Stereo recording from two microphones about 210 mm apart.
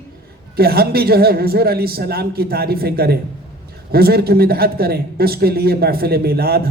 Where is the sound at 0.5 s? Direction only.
45° right (ahead or behind).